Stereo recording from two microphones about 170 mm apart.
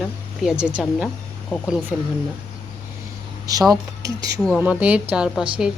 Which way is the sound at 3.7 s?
20° right (ahead or behind).